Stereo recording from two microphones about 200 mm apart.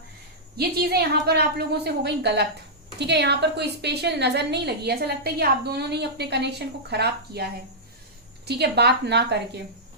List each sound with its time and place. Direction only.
0.5 s a woman's voice: 50° right (ahead or behind)
8.4 s a woman's voice: 55° right (ahead or behind)